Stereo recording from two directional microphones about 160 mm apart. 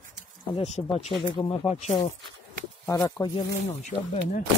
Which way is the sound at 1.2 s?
30° left (ahead or behind).